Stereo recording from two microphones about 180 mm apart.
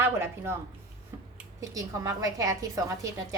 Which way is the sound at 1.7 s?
20° right (ahead or behind).